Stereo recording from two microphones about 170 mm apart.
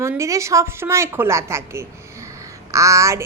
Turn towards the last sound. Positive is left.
turn(degrees=-15)  # may be behind; listen again after turning